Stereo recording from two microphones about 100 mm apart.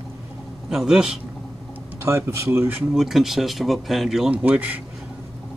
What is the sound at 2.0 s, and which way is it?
Speech, 25° right (ahead or behind).